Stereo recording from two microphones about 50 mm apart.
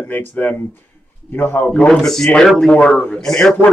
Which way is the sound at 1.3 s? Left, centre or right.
Left.